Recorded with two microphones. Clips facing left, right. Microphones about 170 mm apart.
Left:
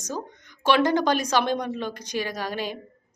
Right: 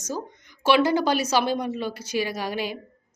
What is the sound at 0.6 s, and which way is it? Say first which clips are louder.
Speech: right 1 dB; 10° right (ahead or behind).